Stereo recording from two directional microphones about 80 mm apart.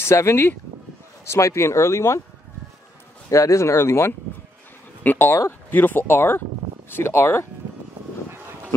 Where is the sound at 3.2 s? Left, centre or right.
Left.